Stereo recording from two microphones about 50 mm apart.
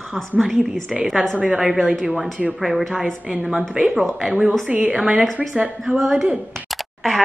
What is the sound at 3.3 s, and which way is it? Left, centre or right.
Speech, centre.